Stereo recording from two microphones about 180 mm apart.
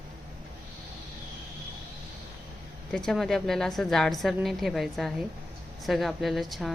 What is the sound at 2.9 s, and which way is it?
A woman's voice, 5° left (ahead or behind).